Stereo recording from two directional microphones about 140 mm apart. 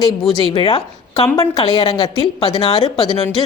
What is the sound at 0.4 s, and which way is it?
A woman's voice, 40° left (ahead or behind).